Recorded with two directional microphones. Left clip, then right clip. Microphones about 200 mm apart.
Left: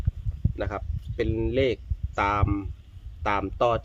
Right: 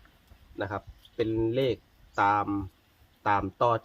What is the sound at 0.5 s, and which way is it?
Speech, 55° left (ahead or behind).